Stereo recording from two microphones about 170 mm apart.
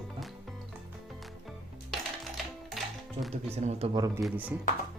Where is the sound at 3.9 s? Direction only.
20° right (ahead or behind).